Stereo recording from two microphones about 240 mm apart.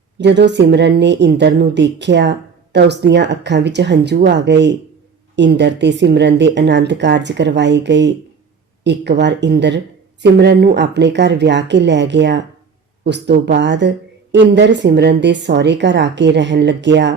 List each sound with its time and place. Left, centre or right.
0.2 s a woman's voice: right